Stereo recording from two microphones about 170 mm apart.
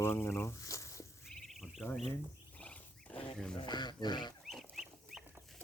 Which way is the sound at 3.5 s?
25° left (ahead or behind).